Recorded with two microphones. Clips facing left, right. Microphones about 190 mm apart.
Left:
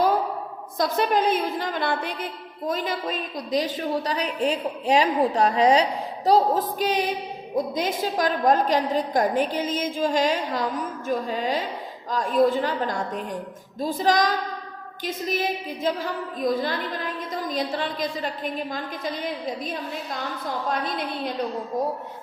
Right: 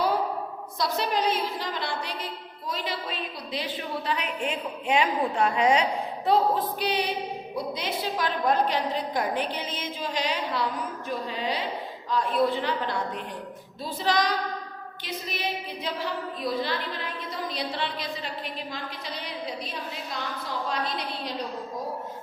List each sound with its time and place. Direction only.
0.8 s a woman's voice: 50° left (ahead or behind)